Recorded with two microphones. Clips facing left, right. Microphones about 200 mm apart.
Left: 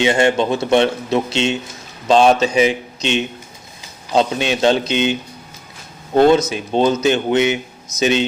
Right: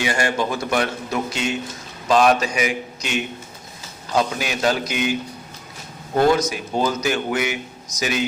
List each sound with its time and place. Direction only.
0.0 s a man's voice: 25° left (ahead or behind)
6.1 s a man's voice: 25° left (ahead or behind)